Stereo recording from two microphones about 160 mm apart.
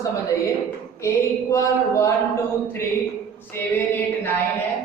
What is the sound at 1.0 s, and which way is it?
Speech, 15° left (ahead or behind).